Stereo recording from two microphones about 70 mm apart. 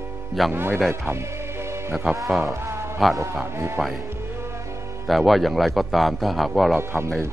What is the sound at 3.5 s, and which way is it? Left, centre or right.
Speech, right.